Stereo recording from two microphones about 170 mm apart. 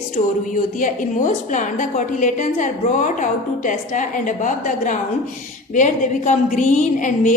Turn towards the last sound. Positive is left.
turn(degrees=50)  # may be behind; listen again after turning